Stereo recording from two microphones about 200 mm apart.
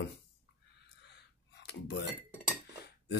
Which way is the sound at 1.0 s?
55° left (ahead or behind).